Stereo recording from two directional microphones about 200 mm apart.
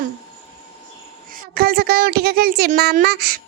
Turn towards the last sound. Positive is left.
turn(degrees=-50)  # may be behind; listen again after turning